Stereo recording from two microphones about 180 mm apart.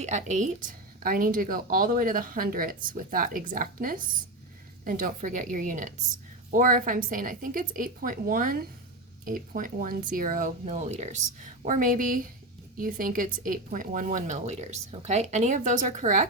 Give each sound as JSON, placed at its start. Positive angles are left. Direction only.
{"t": 0.0, "sound": "a woman's voice", "side_deg": -40}